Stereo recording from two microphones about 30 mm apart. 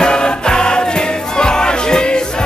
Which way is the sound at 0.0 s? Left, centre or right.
Left.